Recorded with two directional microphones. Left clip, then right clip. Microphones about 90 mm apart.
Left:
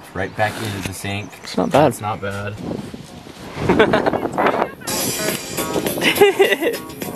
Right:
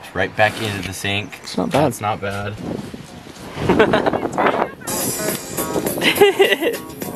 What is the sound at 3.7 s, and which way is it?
Speech, 10° left (ahead or behind).